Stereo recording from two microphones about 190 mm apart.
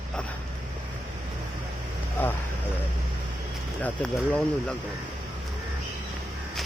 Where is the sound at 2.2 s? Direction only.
10° left (ahead or behind).